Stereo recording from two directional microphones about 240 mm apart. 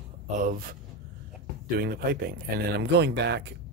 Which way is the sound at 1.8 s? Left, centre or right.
Right.